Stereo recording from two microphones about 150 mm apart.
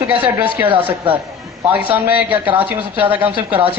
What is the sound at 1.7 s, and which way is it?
Speech, 10° right (ahead or behind).